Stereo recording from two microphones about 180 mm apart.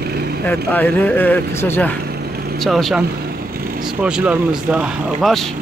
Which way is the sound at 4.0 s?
10° right (ahead or behind).